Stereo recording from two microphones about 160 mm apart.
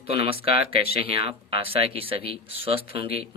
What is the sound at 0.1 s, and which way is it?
Speech, 35° right (ahead or behind).